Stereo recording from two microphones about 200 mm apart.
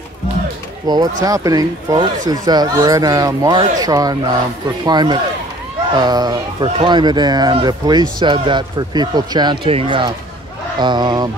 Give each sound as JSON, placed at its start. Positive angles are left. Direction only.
{"t": 0.8, "sound": "speech", "side_deg": -20}